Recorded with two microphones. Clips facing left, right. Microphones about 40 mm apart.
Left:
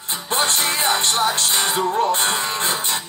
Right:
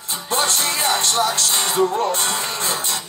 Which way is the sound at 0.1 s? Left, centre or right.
Left.